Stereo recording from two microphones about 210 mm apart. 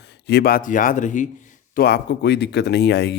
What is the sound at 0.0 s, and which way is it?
A man's voice, 55° left (ahead or behind).